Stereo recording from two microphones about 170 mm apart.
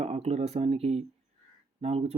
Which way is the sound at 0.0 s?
40° right (ahead or behind).